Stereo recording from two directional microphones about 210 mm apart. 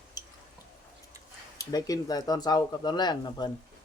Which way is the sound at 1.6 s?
15° left (ahead or behind).